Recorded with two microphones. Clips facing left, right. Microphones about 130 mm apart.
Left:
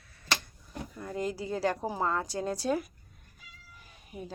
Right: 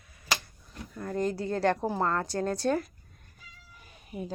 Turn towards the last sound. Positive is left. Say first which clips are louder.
# right 4 dB
turn(degrees=-5)  # may be behind; listen again after turning